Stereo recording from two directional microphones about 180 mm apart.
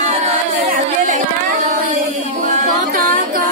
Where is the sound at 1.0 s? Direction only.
45° right (ahead or behind).